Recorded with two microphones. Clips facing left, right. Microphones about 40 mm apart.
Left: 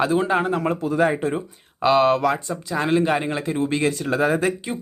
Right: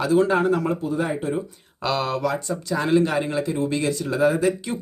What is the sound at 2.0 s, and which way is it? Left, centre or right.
Speech, left.